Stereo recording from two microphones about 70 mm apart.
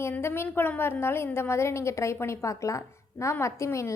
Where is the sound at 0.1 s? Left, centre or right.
Left.